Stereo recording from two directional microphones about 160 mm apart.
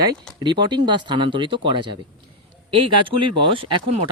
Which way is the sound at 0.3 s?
30° right (ahead or behind).